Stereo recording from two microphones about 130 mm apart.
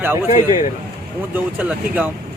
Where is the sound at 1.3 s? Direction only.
10° right (ahead or behind).